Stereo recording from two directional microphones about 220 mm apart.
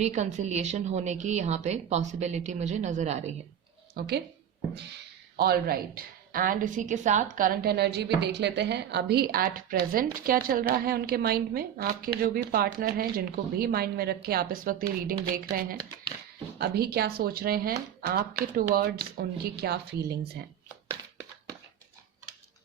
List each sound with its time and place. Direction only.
0.0 s a woman's voice: 30° right (ahead or behind)
3.9 s a woman's voice: 45° right (ahead or behind)
16.6 s a woman's voice: 45° right (ahead or behind)